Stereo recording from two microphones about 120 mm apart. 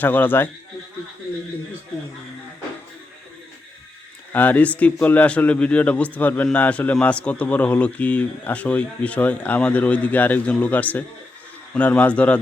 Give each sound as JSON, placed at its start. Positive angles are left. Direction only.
{"t": 0.0, "sound": "speech", "side_deg": 15}
{"t": 4.3, "sound": "speech", "side_deg": 15}